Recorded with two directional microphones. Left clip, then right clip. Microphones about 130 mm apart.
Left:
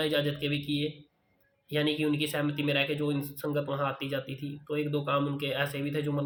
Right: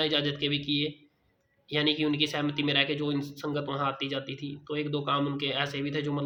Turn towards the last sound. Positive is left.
turn(degrees=-20)  # may be behind; listen again after turning